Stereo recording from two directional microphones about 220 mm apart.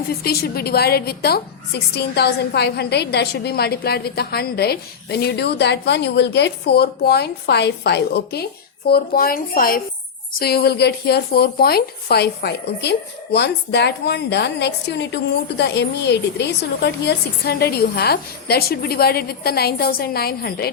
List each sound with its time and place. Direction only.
0.1 s speech: 45° left (ahead or behind)